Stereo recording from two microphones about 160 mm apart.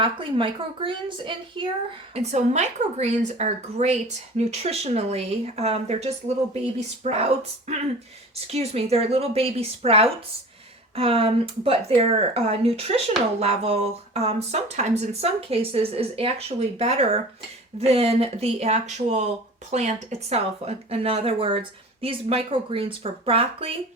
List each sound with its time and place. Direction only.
0.0 s speech: 30° right (ahead or behind)
2.1 s a woman's voice: 45° right (ahead or behind)